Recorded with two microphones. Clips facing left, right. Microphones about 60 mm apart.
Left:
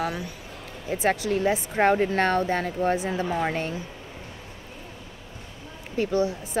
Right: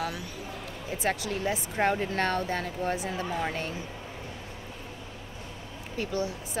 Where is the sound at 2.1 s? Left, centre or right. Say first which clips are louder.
Left 5 dB; left.